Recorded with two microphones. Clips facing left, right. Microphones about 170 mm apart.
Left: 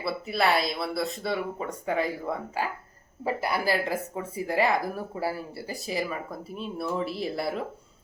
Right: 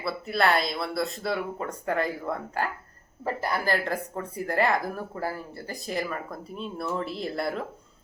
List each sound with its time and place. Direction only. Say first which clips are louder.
0.0 s speech: right 1 dB; centre (ahead or behind)